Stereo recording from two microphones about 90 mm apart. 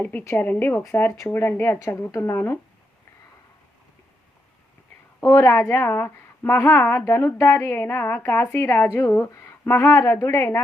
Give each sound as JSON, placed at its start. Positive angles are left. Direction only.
{"t": 0.0, "sound": "a woman's voice", "side_deg": 20}
{"t": 5.2, "sound": "a woman's voice", "side_deg": 35}
{"t": 5.5, "sound": "a woman's voice", "side_deg": 25}